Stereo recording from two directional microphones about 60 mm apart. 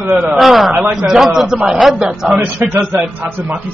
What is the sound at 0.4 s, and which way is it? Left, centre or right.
A man's voice, centre.